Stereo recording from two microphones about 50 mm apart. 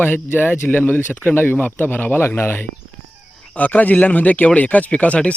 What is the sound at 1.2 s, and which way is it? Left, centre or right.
A man's voice, left.